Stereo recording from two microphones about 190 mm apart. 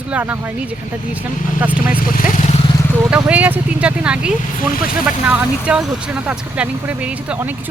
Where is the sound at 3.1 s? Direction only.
5° right (ahead or behind).